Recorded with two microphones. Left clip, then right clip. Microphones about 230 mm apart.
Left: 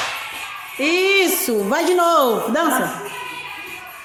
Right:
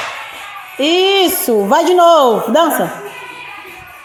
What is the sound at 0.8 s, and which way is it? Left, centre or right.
A child's voice, centre.